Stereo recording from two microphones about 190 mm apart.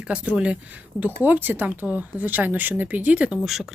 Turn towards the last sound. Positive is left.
turn(degrees=0)  # may be behind; listen again after turning